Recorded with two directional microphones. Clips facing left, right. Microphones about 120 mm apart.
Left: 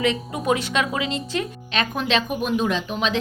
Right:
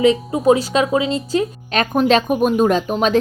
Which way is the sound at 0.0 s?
35° right (ahead or behind).